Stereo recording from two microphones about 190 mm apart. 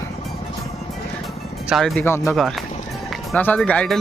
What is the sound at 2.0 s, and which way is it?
Speech, 15° left (ahead or behind).